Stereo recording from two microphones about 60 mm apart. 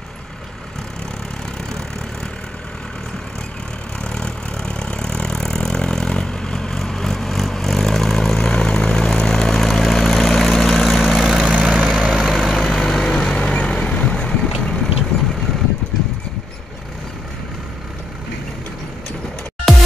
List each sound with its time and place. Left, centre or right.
4.0 s vehicle: centre
11.4 s vehicle: right
12.1 s vehicle: centre
12.4 s vehicle: centre
19.7 s music: centre